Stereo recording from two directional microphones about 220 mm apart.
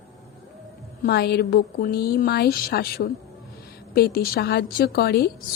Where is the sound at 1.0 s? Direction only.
45° left (ahead or behind).